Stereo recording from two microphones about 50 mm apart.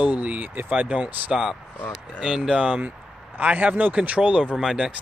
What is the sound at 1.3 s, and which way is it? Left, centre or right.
Speech, centre.